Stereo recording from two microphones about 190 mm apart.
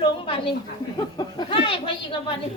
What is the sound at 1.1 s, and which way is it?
Speech, 25° left (ahead or behind).